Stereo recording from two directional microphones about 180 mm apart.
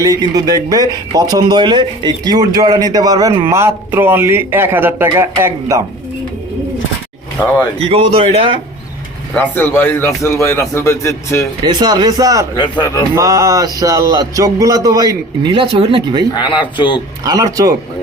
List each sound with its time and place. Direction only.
0.0 s speech: 20° right (ahead or behind)
7.9 s a man's voice: 30° right (ahead or behind)
9.3 s a man's voice: 10° left (ahead or behind)
11.6 s speech: 25° right (ahead or behind)
12.5 s speech: 25° left (ahead or behind)
13.1 s speech: 20° right (ahead or behind)
16.3 s speech: 25° left (ahead or behind)
17.2 s speech: 20° right (ahead or behind)